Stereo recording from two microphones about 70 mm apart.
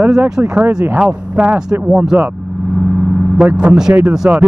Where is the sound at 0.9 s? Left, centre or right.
Centre.